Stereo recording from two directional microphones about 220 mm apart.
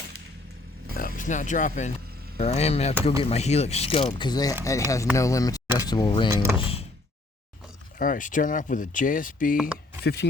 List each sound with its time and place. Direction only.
0.9 s speech: 40° left (ahead or behind)
7.9 s speech: 40° left (ahead or behind)
10.0 s speech: 50° left (ahead or behind)